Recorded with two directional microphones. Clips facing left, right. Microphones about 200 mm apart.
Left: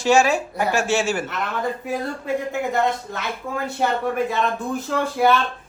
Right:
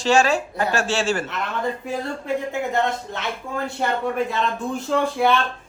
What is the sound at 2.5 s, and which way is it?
Speech, centre (ahead or behind).